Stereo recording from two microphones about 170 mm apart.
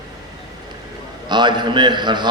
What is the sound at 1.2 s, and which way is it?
A man's voice, 25° right (ahead or behind).